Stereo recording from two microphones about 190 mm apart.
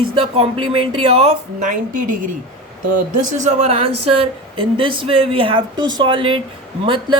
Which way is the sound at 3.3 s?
40° right (ahead or behind).